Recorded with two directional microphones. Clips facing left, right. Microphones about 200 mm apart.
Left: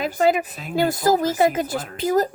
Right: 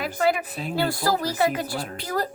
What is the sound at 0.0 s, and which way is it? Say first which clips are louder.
Speech: left 4 dB; 20° left (ahead or behind).